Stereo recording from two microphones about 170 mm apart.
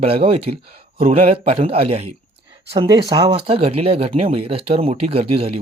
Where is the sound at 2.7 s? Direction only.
25° right (ahead or behind).